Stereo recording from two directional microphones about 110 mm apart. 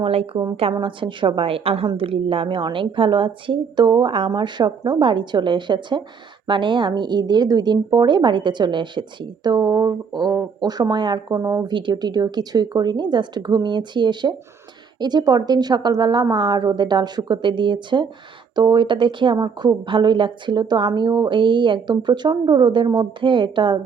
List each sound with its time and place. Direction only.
0.0 s a woman's voice: 60° right (ahead or behind)
0.8 s speech: 50° right (ahead or behind)